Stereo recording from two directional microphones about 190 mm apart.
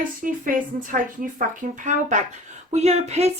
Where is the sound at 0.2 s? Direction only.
45° right (ahead or behind).